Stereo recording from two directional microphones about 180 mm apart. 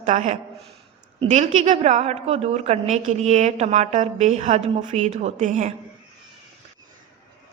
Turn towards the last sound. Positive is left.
turn(degrees=-40)  # may be behind; listen again after turning